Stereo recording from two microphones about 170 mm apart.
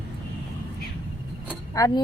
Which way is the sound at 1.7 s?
20° left (ahead or behind).